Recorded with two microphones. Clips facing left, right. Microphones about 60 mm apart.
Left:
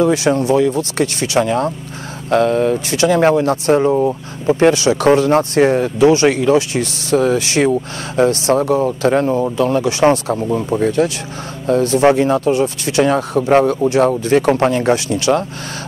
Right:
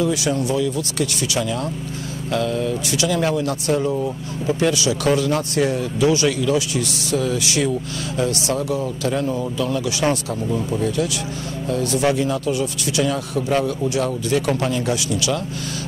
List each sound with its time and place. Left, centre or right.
0.0 s speech: left